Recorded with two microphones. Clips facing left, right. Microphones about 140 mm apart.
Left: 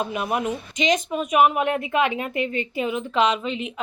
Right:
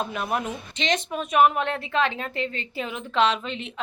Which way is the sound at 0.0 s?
5° left (ahead or behind).